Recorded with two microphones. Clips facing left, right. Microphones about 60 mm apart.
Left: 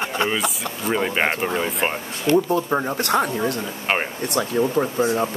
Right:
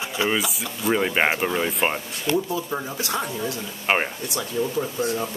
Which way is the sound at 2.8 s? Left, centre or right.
Left.